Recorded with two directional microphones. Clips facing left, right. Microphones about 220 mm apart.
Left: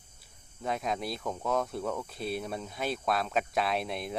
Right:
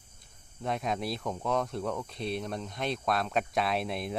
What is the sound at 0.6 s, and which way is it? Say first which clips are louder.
Speech: right 1 dB; centre (ahead or behind).